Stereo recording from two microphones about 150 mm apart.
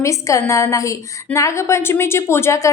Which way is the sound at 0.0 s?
20° left (ahead or behind).